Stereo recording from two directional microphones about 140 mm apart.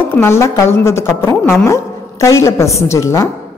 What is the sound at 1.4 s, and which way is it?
Speech, 5° left (ahead or behind).